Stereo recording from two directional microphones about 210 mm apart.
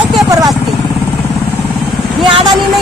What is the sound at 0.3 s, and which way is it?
Vehicle, 15° right (ahead or behind).